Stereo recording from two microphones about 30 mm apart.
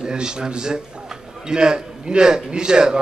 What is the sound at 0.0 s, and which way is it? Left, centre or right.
A man's voice, right.